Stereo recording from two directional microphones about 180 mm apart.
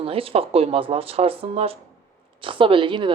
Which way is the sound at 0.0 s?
30° right (ahead or behind).